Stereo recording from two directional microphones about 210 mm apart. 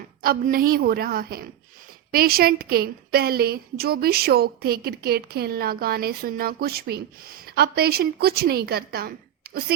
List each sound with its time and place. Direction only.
0.2 s a woman's voice: 45° right (ahead or behind)